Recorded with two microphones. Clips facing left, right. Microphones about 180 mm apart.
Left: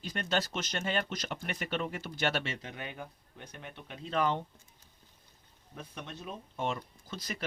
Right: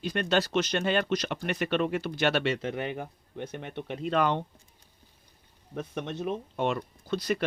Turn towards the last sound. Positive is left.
turn(degrees=-65)  # may be behind; listen again after turning